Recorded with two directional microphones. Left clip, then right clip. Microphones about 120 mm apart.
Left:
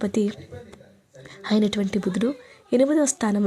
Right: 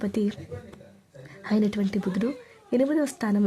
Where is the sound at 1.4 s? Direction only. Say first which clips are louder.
Left 3 dB; 25° left (ahead or behind).